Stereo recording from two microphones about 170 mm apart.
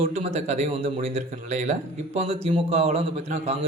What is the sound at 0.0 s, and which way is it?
A man's voice, 40° right (ahead or behind).